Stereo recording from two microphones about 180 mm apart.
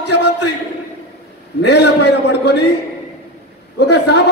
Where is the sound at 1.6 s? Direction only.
70° left (ahead or behind).